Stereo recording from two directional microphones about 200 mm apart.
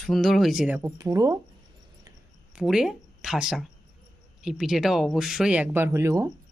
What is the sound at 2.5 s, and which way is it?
Speech, 5° right (ahead or behind).